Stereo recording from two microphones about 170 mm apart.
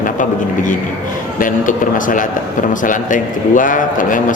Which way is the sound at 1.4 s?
50° left (ahead or behind).